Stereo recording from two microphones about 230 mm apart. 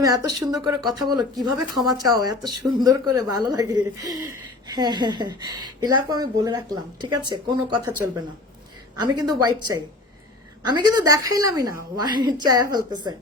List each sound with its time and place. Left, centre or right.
0.0 s a woman's voice: centre
10.7 s a woman's voice: centre